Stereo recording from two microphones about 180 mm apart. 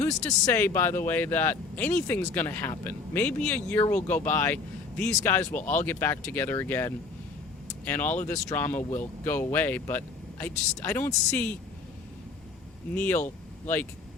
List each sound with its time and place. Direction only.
0.0 s speech: 10° left (ahead or behind)
12.9 s speech: 5° left (ahead or behind)